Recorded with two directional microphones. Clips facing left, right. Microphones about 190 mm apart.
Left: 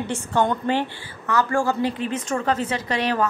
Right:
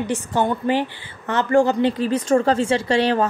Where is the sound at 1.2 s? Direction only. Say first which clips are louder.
Right 4 dB; 20° right (ahead or behind).